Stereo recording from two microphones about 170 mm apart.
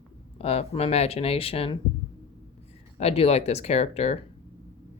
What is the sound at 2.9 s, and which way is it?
Speech, 35° left (ahead or behind).